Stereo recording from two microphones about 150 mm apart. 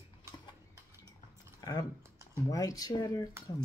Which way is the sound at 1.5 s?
25° left (ahead or behind).